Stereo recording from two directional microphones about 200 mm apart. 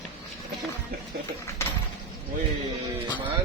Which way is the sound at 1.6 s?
15° left (ahead or behind).